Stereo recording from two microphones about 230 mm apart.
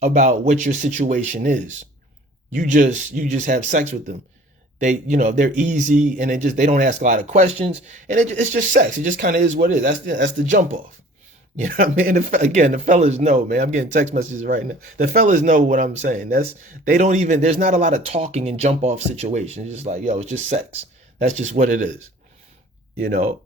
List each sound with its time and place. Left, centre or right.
0.0 s speech: right
10.5 s speech: right
23.0 s speech: right